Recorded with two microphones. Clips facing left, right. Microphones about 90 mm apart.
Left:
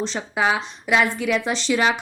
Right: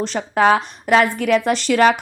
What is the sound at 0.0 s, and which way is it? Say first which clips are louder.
Speech: right 6 dB; 55° right (ahead or behind).